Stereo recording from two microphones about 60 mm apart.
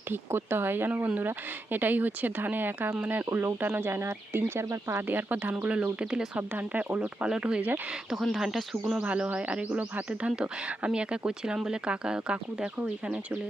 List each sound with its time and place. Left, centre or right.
0.1 s speech: right; by 6.4 s centre
6.5 s speech: right
7.3 s speech: centre
8.4 s speech: centre
9.0 s speech: right